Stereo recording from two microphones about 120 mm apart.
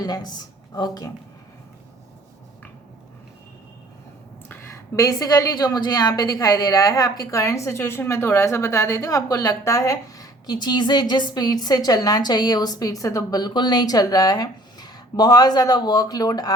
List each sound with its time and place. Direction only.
0.0 s speech: 35° left (ahead or behind)
4.9 s a woman's voice: 30° left (ahead or behind)